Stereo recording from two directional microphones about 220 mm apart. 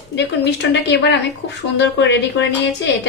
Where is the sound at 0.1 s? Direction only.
55° left (ahead or behind).